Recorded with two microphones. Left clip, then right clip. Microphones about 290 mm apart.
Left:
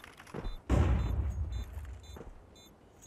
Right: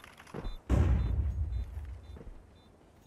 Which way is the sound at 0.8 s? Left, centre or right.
Centre.